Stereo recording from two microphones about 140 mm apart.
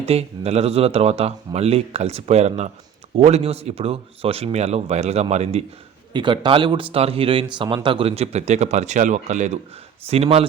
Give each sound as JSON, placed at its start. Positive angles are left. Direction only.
{"t": 0.0, "sound": "speech", "side_deg": -50}
{"t": 6.1, "sound": "speech", "side_deg": -35}
{"t": 10.1, "sound": "speech", "side_deg": -45}